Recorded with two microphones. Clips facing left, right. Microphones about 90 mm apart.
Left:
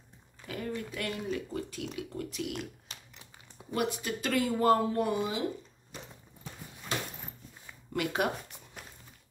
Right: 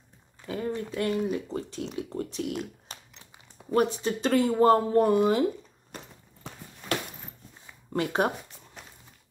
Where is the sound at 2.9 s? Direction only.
40° right (ahead or behind).